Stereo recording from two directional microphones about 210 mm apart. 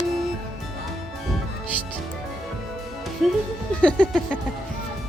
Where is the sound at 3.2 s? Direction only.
Centre (ahead or behind).